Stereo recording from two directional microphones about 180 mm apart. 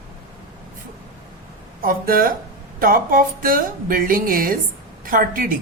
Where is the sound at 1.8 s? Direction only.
50° right (ahead or behind).